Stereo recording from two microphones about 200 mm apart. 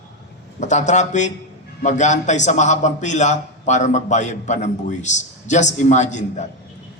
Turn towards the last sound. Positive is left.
turn(degrees=35)  # may be behind; listen again after turning